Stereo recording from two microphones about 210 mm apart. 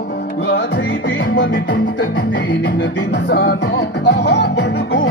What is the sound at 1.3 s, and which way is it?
Music, 60° left (ahead or behind).